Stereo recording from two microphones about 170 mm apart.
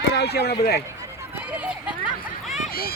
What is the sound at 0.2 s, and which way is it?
Speech, 75° left (ahead or behind).